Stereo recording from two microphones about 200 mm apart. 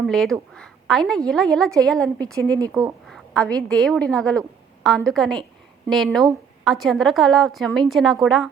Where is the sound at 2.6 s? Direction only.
15° right (ahead or behind).